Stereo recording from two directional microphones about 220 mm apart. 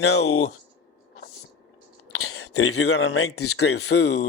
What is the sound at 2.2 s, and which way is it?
Speech, 70° left (ahead or behind).